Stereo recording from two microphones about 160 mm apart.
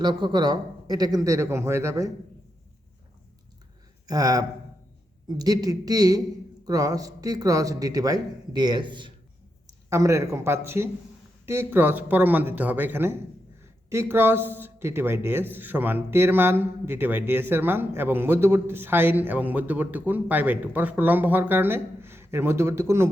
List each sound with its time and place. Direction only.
0.0 s a man's voice: 25° right (ahead or behind)
4.0 s a man's voice: 25° right (ahead or behind)
9.9 s speech: 20° right (ahead or behind)